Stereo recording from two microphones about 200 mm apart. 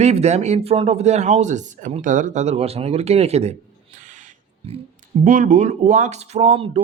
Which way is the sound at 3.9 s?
40° right (ahead or behind).